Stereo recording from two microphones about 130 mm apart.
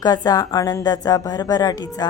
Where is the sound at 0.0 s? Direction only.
30° left (ahead or behind).